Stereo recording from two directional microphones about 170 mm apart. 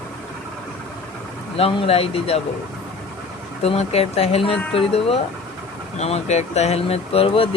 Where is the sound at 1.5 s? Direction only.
35° left (ahead or behind).